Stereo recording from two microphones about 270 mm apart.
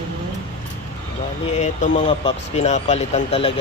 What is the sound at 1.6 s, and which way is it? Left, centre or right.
Speech, left.